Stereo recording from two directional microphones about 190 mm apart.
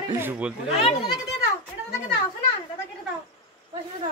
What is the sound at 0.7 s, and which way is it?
Speech, 30° left (ahead or behind).